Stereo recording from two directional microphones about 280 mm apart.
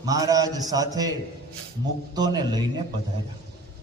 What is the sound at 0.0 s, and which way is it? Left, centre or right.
A man's voice, centre.